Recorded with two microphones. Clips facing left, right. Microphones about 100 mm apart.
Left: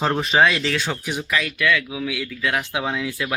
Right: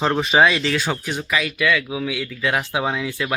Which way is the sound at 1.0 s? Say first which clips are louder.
Even; 10° left (ahead or behind).